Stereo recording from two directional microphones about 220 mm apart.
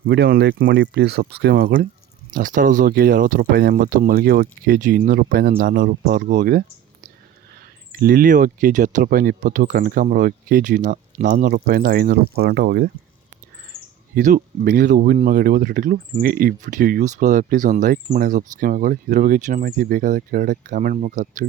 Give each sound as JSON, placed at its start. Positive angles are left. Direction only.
{"t": 0.1, "sound": "speech", "side_deg": -50}
{"t": 7.9, "sound": "speech", "side_deg": -40}
{"t": 14.2, "sound": "speech", "side_deg": -35}